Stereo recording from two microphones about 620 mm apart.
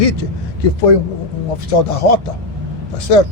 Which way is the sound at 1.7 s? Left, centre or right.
Left.